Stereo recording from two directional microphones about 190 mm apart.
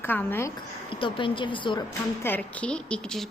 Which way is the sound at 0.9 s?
25° left (ahead or behind).